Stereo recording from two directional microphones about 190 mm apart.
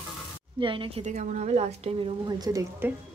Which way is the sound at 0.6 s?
25° right (ahead or behind).